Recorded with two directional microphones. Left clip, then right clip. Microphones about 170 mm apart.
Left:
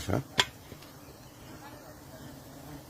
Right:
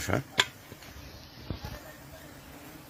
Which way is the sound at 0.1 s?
5° right (ahead or behind).